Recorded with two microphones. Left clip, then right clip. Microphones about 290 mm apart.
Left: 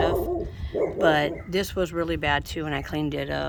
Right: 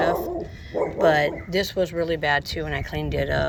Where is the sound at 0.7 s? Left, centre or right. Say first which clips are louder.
Right 2 dB; centre.